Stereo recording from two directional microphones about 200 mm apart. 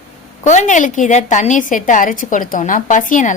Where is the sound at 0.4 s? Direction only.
35° left (ahead or behind).